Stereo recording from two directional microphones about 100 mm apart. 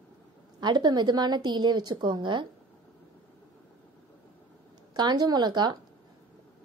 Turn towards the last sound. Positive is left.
turn(degrees=-45)  # may be behind; listen again after turning